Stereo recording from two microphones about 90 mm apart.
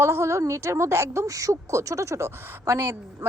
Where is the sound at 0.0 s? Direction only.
30° right (ahead or behind).